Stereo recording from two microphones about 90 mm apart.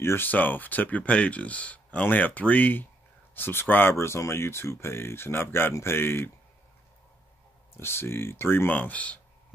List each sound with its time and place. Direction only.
0.0 s speech: 25° left (ahead or behind)
7.7 s speech: 25° left (ahead or behind)